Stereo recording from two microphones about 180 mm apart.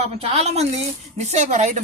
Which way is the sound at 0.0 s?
35° right (ahead or behind).